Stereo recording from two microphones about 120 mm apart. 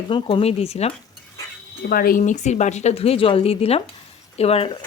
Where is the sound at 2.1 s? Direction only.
85° left.